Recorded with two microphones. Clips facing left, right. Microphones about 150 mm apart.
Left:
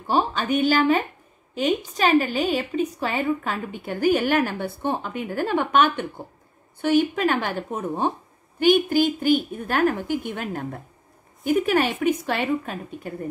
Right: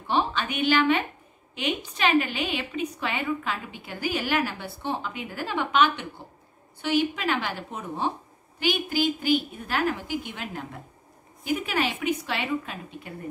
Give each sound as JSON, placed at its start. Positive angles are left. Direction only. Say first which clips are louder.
{"t": 0.0, "sound": "a woman's voice", "louder": "left 3 dB", "side_deg": 40}